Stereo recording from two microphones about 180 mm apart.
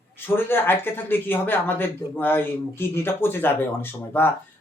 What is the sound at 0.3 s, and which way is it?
Speech, 10° left (ahead or behind).